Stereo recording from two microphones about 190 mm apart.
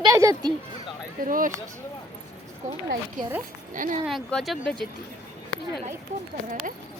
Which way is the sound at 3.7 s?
45° right (ahead or behind).